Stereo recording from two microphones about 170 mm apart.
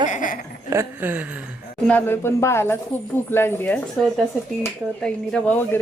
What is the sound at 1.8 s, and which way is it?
Speech, 10° left (ahead or behind).